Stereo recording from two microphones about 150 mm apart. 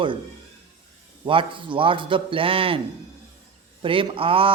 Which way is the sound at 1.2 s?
35° right (ahead or behind).